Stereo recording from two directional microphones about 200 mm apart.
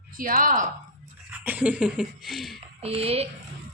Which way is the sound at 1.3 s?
10° right (ahead or behind).